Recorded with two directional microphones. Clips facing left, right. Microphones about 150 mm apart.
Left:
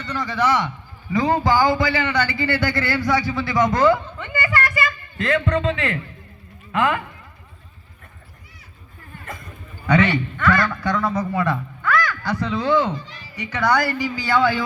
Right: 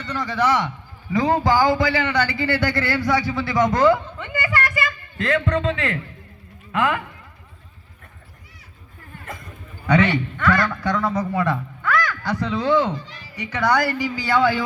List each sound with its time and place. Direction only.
0.0 s a man's voice: 30° right (ahead or behind); by 6.0 s 20° left (ahead or behind)
6.7 s speech: 35° left (ahead or behind)
9.8 s a man's voice: 20° right (ahead or behind)